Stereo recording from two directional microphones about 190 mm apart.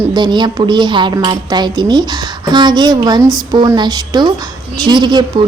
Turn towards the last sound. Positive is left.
turn(degrees=-25)  # may be behind; listen again after turning